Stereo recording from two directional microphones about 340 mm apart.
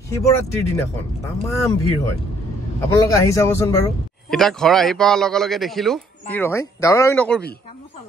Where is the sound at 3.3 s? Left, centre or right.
Centre.